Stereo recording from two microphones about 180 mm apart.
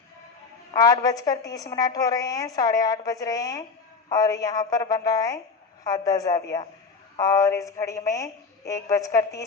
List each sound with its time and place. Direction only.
0.7 s a woman's voice: 20° left (ahead or behind)